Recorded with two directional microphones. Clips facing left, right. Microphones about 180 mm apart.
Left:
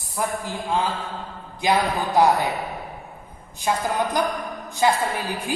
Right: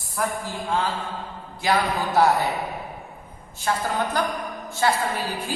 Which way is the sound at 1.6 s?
20° left (ahead or behind).